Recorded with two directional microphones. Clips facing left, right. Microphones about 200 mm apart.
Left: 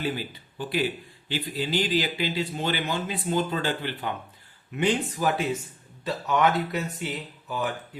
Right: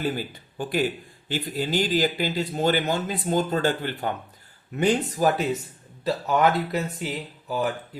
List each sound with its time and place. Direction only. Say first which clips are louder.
0.0 s speech: right 2 dB; 45° right (ahead or behind)